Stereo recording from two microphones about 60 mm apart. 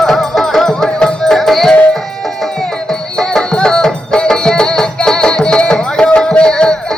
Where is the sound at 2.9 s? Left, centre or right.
Centre.